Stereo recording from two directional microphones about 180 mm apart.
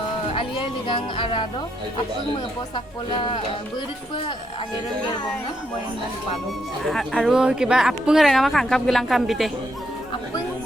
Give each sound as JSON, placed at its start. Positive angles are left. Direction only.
{"t": 0.3, "sound": "speech", "side_deg": 30}
{"t": 2.7, "sound": "speech", "side_deg": 30}
{"t": 6.8, "sound": "speech", "side_deg": 0}